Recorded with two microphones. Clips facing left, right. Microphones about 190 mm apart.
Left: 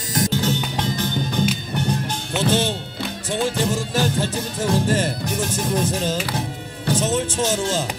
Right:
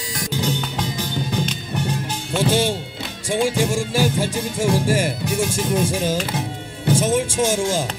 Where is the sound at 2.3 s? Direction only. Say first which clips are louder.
Right 2 dB; 10° right (ahead or behind).